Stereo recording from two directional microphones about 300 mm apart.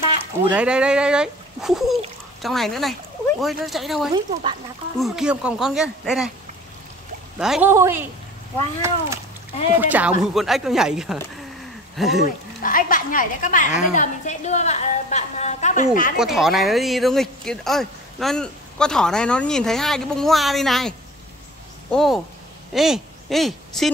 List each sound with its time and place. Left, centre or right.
0.5 s speech: centre
4.1 s speech: centre
4.9 s speech: centre
7.3 s speech: centre
9.8 s speech: centre
12.6 s a woman's voice: left
16.2 s speech: centre
21.9 s speech: centre